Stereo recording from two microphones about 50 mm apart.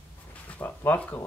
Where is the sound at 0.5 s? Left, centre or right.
Left.